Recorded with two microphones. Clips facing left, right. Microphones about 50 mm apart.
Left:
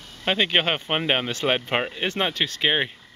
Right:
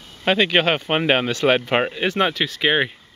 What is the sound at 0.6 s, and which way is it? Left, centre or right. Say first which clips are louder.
Speech: right 5 dB; right.